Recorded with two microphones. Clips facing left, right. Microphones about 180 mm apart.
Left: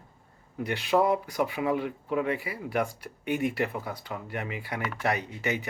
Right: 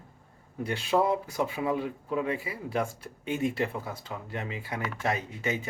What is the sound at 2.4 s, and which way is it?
Speech, 25° right (ahead or behind).